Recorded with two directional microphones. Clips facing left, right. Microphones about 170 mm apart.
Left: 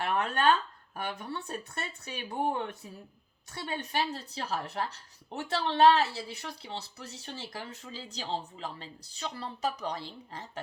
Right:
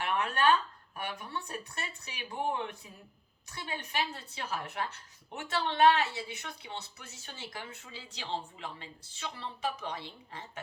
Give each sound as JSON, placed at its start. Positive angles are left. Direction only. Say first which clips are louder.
{"t": 0.0, "sound": "a sound", "louder": "left 2 dB", "side_deg": 35}
{"t": 1.2, "sound": "speech", "louder": "left 2 dB", "side_deg": 30}
{"t": 3.7, "sound": "speech", "louder": "left 3 dB", "side_deg": 35}